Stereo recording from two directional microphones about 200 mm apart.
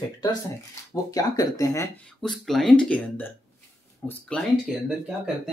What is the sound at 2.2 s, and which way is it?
Speech, centre (ahead or behind).